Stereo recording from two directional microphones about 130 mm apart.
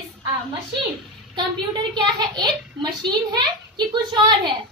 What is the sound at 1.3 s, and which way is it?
A woman's voice, 35° right (ahead or behind).